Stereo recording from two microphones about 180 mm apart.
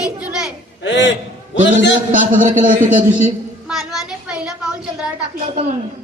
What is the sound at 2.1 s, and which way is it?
Speech, 45° right (ahead or behind).